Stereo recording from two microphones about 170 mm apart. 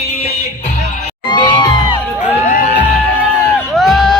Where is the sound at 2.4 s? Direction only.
50° left (ahead or behind).